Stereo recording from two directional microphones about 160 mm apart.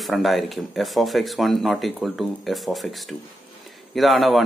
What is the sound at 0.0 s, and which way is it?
A man's voice, centre (ahead or behind).